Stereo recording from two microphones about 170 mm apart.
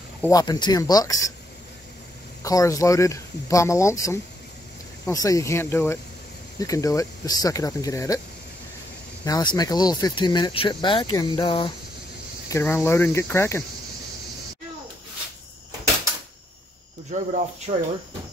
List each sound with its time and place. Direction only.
0.3 s speech: 25° left (ahead or behind)
2.4 s speech: 20° left (ahead or behind)
9.2 s speech: 25° left (ahead or behind)
12.4 s speech: 15° left (ahead or behind)
17.1 s speech: 45° right (ahead or behind)